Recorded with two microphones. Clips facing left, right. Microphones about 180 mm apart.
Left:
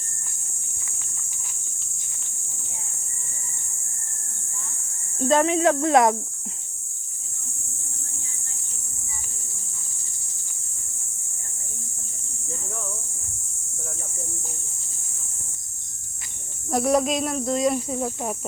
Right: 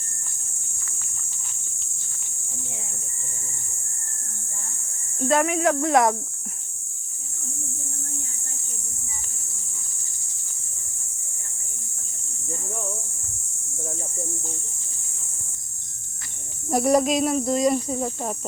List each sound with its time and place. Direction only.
5.3 s speech: 25° left (ahead or behind)
16.6 s speech: centre (ahead or behind)